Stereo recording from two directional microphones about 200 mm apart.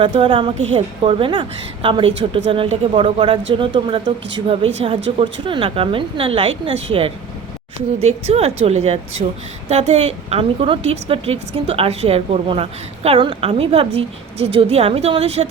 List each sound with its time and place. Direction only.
0.0 s a woman's voice: 25° right (ahead or behind)
7.9 s a woman's voice: 30° right (ahead or behind)